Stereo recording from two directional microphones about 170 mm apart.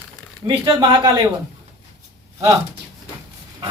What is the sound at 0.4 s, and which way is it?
Speech, 25° right (ahead or behind).